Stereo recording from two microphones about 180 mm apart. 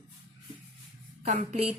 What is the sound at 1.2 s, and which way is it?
Speech, 40° right (ahead or behind).